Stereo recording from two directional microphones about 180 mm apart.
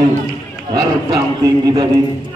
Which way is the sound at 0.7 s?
20° right (ahead or behind).